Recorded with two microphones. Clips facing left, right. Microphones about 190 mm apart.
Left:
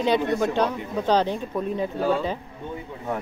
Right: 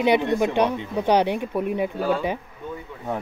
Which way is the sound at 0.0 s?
15° right (ahead or behind).